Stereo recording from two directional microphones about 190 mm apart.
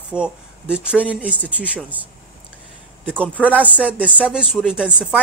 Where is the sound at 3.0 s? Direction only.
Centre (ahead or behind).